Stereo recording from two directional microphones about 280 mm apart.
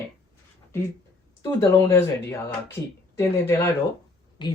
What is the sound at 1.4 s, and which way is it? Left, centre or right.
Speech, centre.